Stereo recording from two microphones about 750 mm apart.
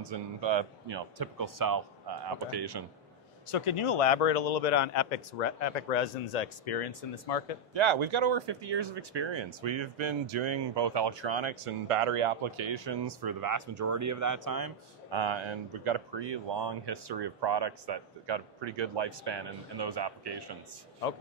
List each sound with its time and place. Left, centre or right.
0.0 s speech: right
3.5 s speech: left
7.7 s speech: right